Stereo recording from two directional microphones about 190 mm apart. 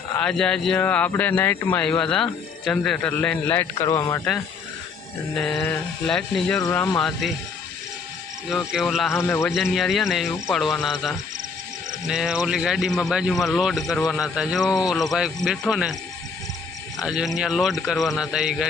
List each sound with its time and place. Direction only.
0.2 s speech: 5° left (ahead or behind)
5.3 s speech: centre (ahead or behind)
8.4 s speech: centre (ahead or behind)
9.1 s speech: 10° left (ahead or behind)
9.5 s speech: centre (ahead or behind)
17.0 s speech: centre (ahead or behind)